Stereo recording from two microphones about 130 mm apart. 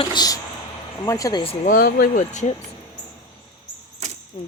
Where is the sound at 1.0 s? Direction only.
25° left (ahead or behind).